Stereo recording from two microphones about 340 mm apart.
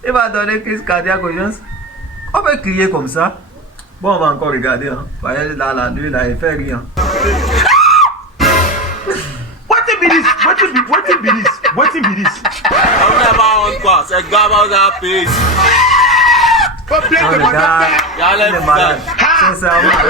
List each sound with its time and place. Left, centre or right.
0.0 s speech: centre
6.9 s music: centre
9.6 s speech: centre
12.8 s speech: left
13.1 s speech: centre